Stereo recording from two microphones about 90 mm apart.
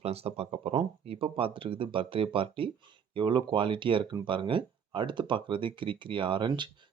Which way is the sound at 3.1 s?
65° right (ahead or behind).